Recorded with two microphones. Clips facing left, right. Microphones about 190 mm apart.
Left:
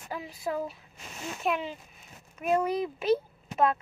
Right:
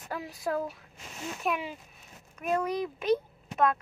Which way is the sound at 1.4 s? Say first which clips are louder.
Left 2 dB; 10° right (ahead or behind).